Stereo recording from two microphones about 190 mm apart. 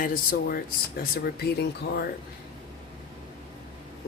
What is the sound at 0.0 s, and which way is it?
Speech, 45° left (ahead or behind).